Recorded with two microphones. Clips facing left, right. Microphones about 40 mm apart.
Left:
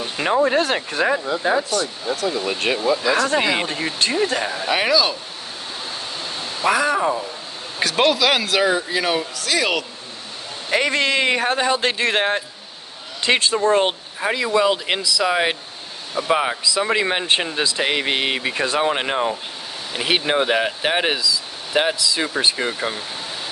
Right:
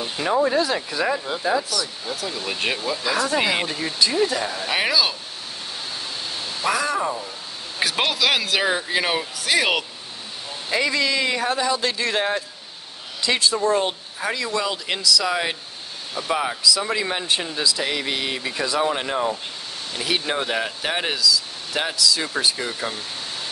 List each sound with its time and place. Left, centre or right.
0.2 s speech: left
2.2 s speech: centre
3.6 s speech: left
4.6 s speech: centre
6.6 s speech: left
7.8 s speech: centre
8.7 s speech: right
10.7 s speech: left
14.2 s speech: left